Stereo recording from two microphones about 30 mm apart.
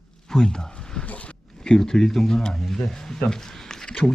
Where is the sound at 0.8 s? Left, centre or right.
Left.